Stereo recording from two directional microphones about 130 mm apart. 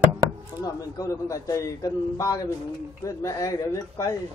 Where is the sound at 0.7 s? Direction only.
30° left (ahead or behind).